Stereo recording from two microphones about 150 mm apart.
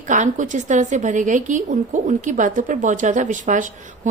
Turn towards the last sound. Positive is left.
turn(degrees=-60)  # may be behind; listen again after turning